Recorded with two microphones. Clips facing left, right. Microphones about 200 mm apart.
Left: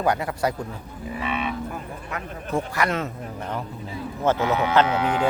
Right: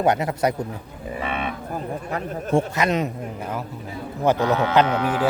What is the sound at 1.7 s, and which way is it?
Speech, 35° right (ahead or behind).